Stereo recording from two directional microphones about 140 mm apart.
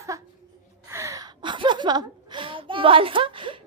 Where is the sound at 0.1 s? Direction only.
25° right (ahead or behind).